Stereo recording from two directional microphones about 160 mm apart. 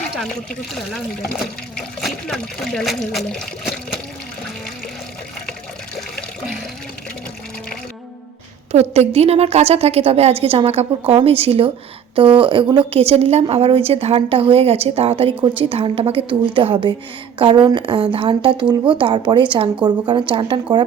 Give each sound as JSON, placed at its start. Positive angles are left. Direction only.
{"t": 0.2, "sound": "speech", "side_deg": 0}
{"t": 6.1, "sound": "water", "side_deg": 0}
{"t": 8.7, "sound": "a woman's voice", "side_deg": -40}